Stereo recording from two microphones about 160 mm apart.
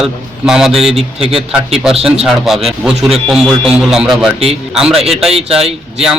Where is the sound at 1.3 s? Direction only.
40° right (ahead or behind).